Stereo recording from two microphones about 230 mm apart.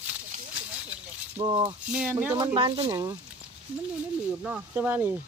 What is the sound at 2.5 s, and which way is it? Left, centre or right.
Speech, right.